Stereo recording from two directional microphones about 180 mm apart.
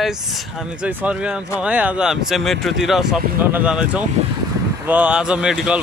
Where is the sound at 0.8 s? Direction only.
5° right (ahead or behind).